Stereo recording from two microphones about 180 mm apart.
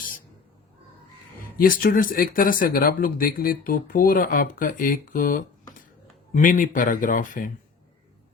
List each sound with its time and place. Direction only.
1.5 s speech: 50° left (ahead or behind)